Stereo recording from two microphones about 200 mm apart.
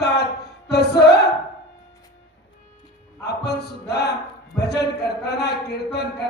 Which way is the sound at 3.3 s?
55° left (ahead or behind).